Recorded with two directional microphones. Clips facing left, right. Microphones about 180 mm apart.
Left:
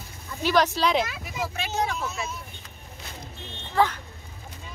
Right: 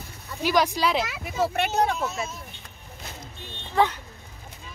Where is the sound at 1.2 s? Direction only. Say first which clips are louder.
Right 7 dB; 60° right (ahead or behind).